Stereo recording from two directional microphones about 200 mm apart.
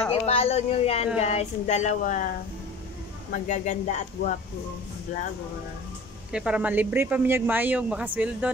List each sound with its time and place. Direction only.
0.1 s speech: 30° left (ahead or behind)
3.4 s speech: 35° left (ahead or behind)
6.3 s speech: 5° right (ahead or behind)